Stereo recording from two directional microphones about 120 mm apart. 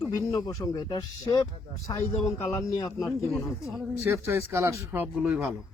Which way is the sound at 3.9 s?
25° right (ahead or behind).